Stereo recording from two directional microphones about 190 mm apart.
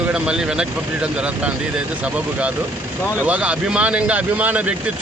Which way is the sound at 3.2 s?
5° right (ahead or behind).